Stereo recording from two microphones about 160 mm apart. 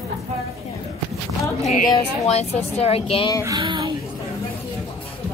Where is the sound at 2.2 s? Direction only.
40° left (ahead or behind).